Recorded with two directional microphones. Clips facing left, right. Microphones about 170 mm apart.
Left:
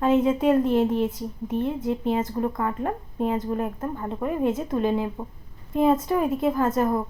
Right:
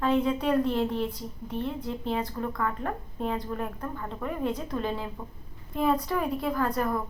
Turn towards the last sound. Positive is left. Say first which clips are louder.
# left 5 dB
turn(degrees=25)  # may be behind; listen again after turning